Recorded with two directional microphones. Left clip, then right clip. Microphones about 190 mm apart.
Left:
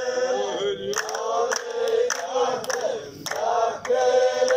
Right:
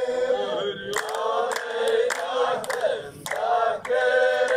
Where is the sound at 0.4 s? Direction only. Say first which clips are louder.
Left 1 dB; 10° left (ahead or behind).